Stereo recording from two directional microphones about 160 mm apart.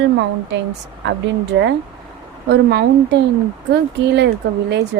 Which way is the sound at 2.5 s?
90° right.